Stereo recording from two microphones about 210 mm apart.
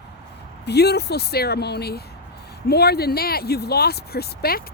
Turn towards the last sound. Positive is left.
turn(degrees=45)  # may be behind; listen again after turning